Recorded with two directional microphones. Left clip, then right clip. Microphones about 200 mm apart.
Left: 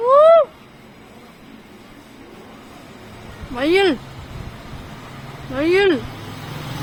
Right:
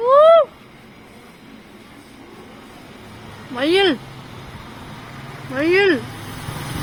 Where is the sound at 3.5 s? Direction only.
10° left (ahead or behind).